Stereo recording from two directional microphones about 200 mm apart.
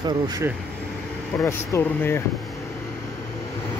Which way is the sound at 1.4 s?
10° left (ahead or behind).